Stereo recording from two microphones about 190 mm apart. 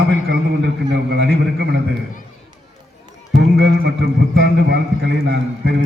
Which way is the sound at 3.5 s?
65° right (ahead or behind).